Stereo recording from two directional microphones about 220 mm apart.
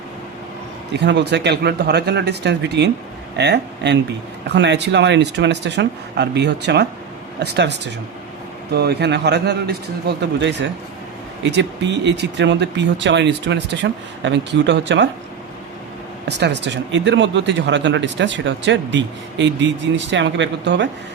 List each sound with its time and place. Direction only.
0.9 s speech: 50° right (ahead or behind)
16.2 s speech: 50° right (ahead or behind)